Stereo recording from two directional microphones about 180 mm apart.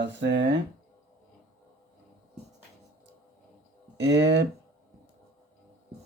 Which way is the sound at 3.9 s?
75° right (ahead or behind).